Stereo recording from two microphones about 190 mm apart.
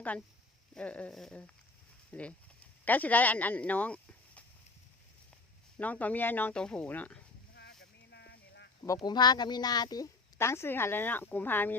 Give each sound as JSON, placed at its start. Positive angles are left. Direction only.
{"t": 0.7, "sound": "a sound", "side_deg": 5}
{"t": 2.1, "sound": "speech", "side_deg": 5}
{"t": 5.8, "sound": "speech", "side_deg": 10}
{"t": 7.5, "sound": "boat", "side_deg": 60}
{"t": 9.0, "sound": "speech", "side_deg": 20}